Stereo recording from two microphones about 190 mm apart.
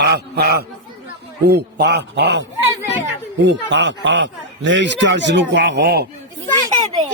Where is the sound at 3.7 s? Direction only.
70° right (ahead or behind).